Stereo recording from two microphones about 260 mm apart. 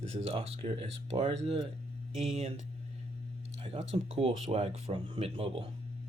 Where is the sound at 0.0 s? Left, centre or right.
Right.